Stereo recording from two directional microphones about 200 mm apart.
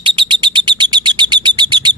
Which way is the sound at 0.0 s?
25° right (ahead or behind).